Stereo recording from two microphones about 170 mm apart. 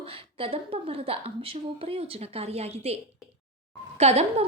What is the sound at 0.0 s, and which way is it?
A woman's voice, 35° right (ahead or behind).